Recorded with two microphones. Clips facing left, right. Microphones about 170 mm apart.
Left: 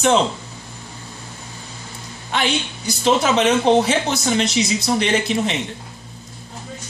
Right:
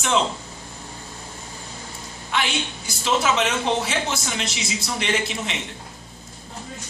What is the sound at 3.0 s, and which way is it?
Speech, 35° left (ahead or behind).